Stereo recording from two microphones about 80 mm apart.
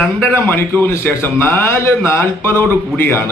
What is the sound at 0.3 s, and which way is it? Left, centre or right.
A man's voice, left.